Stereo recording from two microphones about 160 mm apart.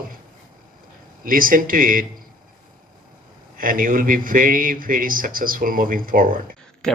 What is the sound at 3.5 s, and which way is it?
Speech, 60° right (ahead or behind).